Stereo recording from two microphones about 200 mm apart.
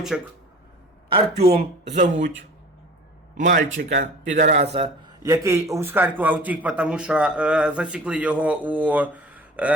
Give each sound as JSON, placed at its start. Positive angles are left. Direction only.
{"t": 0.1, "sound": "speech", "side_deg": 0}
{"t": 1.4, "sound": "a man's voice", "side_deg": -30}
{"t": 3.3, "sound": "a man's voice", "side_deg": -40}
{"t": 5.2, "sound": "a man's voice", "side_deg": -15}